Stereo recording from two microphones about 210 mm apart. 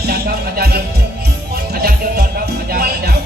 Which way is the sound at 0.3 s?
50° right (ahead or behind).